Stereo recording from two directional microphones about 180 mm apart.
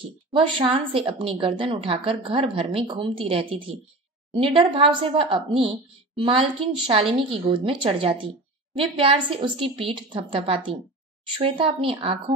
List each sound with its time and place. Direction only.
0.3 s a woman's voice: 30° right (ahead or behind)